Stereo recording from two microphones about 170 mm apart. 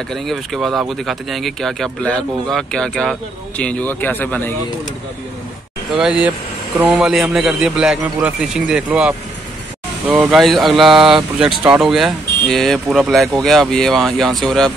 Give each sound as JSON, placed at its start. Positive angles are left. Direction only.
{"t": 0.1, "sound": "speech", "side_deg": 0}
{"t": 5.9, "sound": "speech", "side_deg": -5}